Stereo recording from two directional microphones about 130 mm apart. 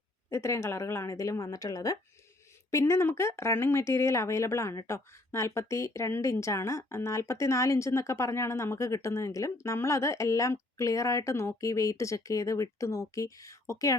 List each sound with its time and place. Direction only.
0.3 s speech: 20° left (ahead or behind)